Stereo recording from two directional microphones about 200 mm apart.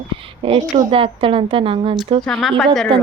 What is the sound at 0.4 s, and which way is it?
A woman's voice, 25° right (ahead or behind).